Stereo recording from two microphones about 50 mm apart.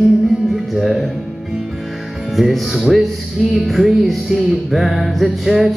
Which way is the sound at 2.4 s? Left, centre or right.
Centre.